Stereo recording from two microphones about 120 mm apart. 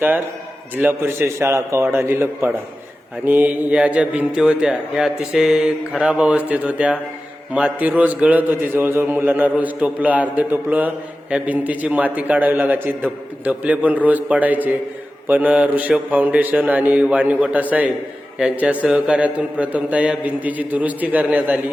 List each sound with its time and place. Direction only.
0.8 s a man's voice: 15° right (ahead or behind)